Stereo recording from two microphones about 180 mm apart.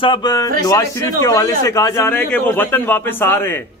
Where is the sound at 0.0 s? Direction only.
25° left (ahead or behind).